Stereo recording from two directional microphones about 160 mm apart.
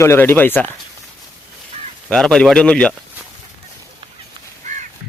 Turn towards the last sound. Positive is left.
turn(degrees=-50)  # may be behind; listen again after turning